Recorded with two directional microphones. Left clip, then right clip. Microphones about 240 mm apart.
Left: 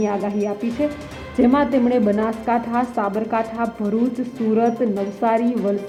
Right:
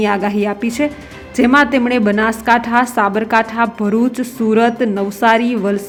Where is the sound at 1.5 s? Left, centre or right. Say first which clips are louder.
Right 8 dB; centre.